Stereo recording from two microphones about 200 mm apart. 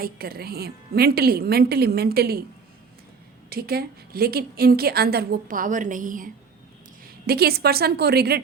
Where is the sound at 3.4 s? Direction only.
50° right (ahead or behind).